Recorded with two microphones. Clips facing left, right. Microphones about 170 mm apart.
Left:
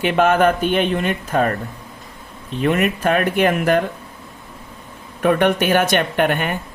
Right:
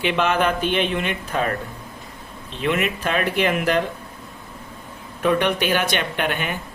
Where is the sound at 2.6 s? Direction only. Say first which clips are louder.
Left 5 dB; 45° left (ahead or behind).